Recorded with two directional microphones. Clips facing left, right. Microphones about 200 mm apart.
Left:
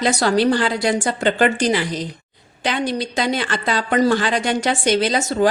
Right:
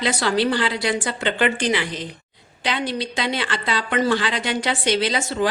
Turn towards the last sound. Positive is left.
turn(degrees=45)  # may be behind; listen again after turning